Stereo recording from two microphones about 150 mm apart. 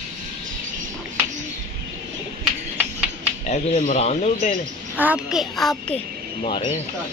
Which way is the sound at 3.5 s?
50° left (ahead or behind).